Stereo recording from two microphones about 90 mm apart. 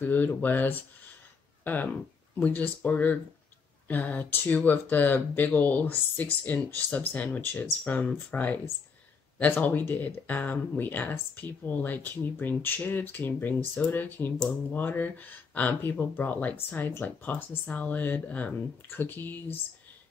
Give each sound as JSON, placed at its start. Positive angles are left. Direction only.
{"t": 0.0, "sound": "speech", "side_deg": 20}